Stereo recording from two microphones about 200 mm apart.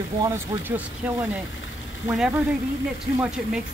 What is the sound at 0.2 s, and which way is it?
Speech, 15° right (ahead or behind).